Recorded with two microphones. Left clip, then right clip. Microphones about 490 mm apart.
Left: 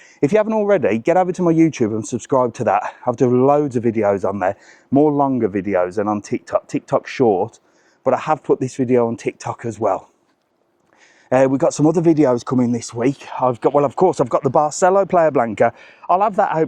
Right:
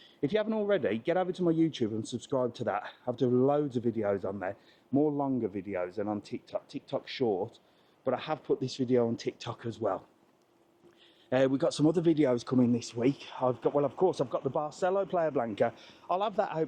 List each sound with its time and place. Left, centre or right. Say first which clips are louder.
0.2 s a man's voice: left 14 dB; left
11.3 s speech: left 13 dB; left